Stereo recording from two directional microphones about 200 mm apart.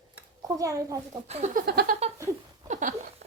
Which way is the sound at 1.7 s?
50° right (ahead or behind).